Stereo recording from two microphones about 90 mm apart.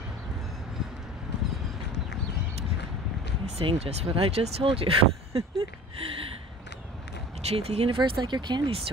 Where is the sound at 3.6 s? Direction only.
85° right.